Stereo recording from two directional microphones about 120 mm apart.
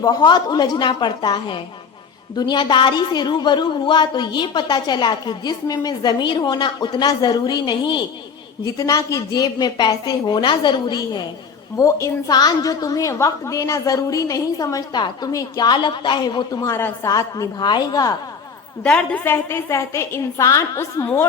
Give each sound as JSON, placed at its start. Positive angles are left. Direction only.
{"t": 0.0, "sound": "a woman's voice", "side_deg": 35}
{"t": 8.8, "sound": "a woman's voice", "side_deg": 25}
{"t": 11.8, "sound": "a woman's voice", "side_deg": 25}
{"t": 18.8, "sound": "a woman's voice", "side_deg": 10}